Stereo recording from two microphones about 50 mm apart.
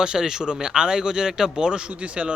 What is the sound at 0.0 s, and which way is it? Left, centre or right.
Speech, centre.